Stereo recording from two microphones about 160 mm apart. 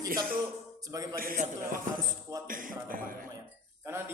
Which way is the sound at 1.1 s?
60° right (ahead or behind).